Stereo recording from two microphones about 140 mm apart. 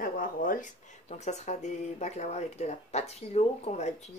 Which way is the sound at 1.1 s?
55° left (ahead or behind).